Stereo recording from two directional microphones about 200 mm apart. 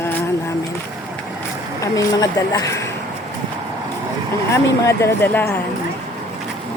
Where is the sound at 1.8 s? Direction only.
15° left (ahead or behind).